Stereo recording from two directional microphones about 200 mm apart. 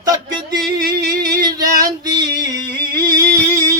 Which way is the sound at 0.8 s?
50° right (ahead or behind).